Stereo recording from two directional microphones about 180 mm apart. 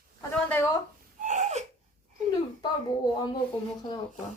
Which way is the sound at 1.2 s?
40° right (ahead or behind).